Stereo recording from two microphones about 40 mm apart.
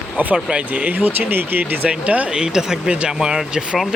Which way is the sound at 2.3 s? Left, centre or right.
Centre.